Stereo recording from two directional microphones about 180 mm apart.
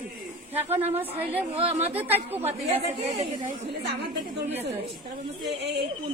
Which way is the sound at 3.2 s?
45° right (ahead or behind).